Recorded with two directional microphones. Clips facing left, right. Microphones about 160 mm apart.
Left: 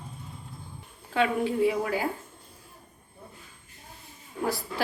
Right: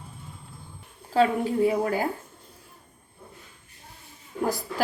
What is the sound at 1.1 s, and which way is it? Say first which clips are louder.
Speech: right 3 dB; 35° right (ahead or behind).